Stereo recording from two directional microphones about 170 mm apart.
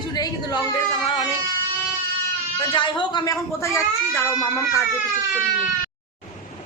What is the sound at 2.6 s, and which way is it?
Speech, 30° left (ahead or behind).